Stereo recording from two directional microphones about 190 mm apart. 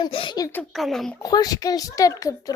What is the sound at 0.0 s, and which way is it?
Speech, 25° left (ahead or behind).